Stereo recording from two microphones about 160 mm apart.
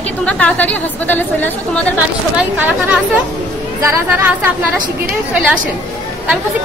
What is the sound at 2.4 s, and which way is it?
A woman's voice, 10° right (ahead or behind).